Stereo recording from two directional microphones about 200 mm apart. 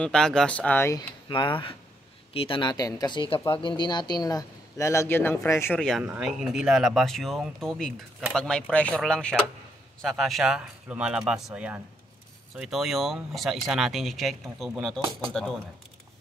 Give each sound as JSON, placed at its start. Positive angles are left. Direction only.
{"t": 0.0, "sound": "speech", "side_deg": 5}